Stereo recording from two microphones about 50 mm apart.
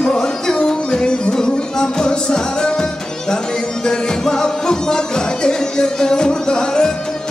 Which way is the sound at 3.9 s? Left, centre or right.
Centre.